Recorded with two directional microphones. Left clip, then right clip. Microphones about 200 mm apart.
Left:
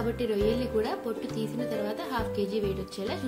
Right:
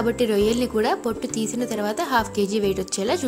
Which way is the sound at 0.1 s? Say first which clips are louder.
Right 7 dB; 45° right (ahead or behind).